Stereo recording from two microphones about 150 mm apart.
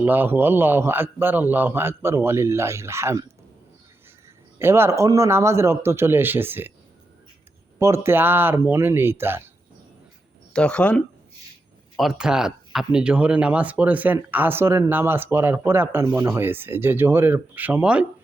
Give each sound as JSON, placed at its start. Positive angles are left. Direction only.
{"t": 0.0, "sound": "speech", "side_deg": -15}
{"t": 4.6, "sound": "speech", "side_deg": -15}
{"t": 7.8, "sound": "speech", "side_deg": -20}
{"t": 10.5, "sound": "speech", "side_deg": 5}
{"t": 11.9, "sound": "speech", "side_deg": -5}